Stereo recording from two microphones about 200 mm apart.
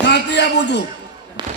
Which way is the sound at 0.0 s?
60° left (ahead or behind).